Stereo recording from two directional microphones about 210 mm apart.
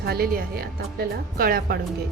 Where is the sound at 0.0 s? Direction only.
45° right (ahead or behind).